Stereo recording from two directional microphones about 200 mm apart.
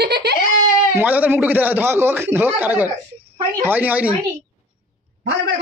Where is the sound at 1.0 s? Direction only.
10° right (ahead or behind).